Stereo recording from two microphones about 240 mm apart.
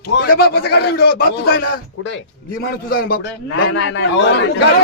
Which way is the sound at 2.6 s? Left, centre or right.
Left.